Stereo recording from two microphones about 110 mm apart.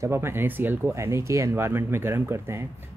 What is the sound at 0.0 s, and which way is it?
Speech, 25° right (ahead or behind).